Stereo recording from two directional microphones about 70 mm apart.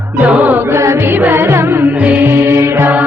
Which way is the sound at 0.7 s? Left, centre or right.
Right.